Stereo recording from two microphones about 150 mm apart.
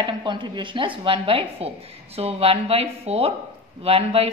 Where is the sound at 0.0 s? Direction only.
30° right (ahead or behind).